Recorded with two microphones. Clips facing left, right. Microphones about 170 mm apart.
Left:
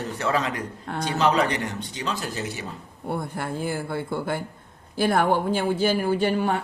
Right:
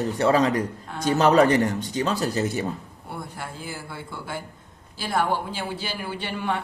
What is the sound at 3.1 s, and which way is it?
Speech, 55° left (ahead or behind).